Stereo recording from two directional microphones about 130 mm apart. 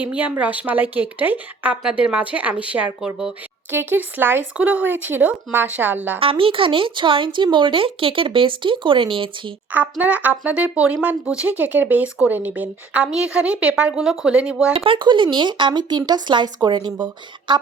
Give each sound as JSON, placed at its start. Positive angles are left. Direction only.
{"t": 0.0, "sound": "speech", "side_deg": -10}
{"t": 3.7, "sound": "speech", "side_deg": -15}
{"t": 6.1, "sound": "speech", "side_deg": -45}
{"t": 10.0, "sound": "speech", "side_deg": -10}
{"t": 14.7, "sound": "speech", "side_deg": -45}